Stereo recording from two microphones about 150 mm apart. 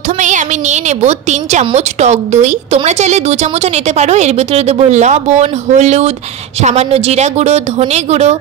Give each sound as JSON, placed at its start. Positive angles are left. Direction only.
{"t": 0.2, "sound": "a woman's voice", "side_deg": -55}